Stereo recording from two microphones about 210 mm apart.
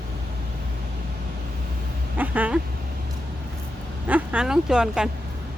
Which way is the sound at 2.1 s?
10° right (ahead or behind).